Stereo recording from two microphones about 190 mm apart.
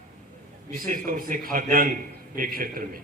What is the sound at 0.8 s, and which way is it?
A man's voice, 50° right (ahead or behind).